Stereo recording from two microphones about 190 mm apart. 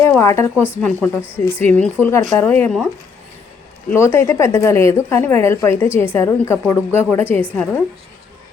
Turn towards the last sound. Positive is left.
turn(degrees=10)  # may be behind; listen again after turning